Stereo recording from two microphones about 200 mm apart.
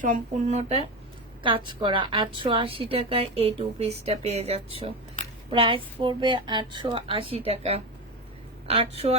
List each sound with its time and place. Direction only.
0.0 s a woman's voice: 35° right (ahead or behind)